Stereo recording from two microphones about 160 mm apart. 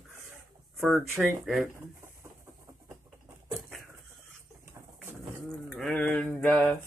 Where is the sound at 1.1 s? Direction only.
Centre (ahead or behind).